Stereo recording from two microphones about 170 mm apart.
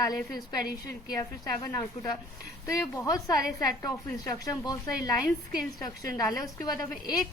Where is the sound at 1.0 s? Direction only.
25° left (ahead or behind).